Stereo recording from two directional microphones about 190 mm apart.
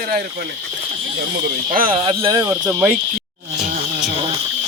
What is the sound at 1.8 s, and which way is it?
Speech, 30° right (ahead or behind).